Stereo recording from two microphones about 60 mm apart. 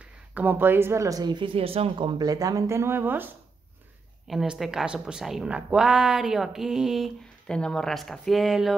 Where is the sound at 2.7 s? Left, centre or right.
Right.